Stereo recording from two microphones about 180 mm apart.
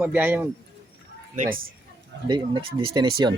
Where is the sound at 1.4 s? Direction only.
50° right (ahead or behind).